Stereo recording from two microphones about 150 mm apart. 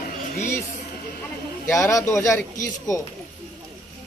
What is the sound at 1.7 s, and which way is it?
Speech, 20° left (ahead or behind).